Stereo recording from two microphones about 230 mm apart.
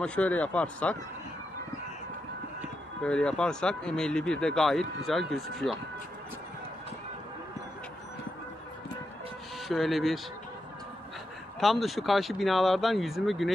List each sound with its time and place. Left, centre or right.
0.0 s speech: centre
3.0 s speech: centre
9.7 s speech: centre
11.6 s speech: centre